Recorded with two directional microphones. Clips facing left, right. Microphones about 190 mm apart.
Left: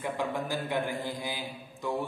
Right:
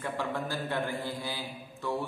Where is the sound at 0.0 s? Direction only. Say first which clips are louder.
Left 1 dB; 15° left (ahead or behind).